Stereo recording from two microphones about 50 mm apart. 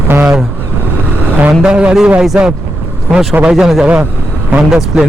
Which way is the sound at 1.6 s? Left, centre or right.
Centre.